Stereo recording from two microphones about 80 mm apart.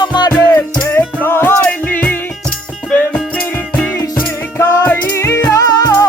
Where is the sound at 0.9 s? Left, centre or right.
Left.